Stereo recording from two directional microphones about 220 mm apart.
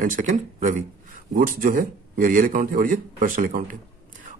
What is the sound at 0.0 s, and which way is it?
Speech, 35° right (ahead or behind).